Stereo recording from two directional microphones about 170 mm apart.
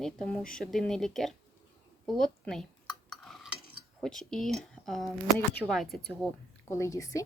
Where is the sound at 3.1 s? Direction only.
Centre (ahead or behind).